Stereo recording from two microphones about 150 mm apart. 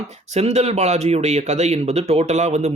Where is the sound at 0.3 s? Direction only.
45° right (ahead or behind).